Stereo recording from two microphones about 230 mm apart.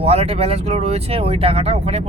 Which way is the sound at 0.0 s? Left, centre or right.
Right.